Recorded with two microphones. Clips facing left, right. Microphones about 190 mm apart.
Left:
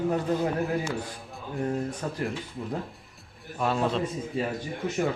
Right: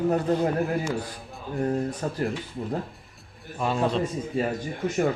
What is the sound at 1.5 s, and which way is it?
Speech, 40° right (ahead or behind).